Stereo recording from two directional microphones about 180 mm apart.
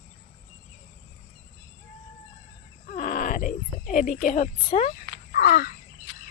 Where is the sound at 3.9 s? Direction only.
45° left (ahead or behind).